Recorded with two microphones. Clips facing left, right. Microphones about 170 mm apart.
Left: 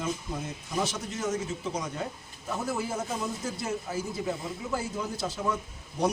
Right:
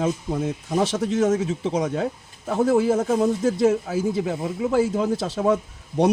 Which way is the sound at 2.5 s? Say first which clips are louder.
Right 13 dB; 70° right (ahead or behind).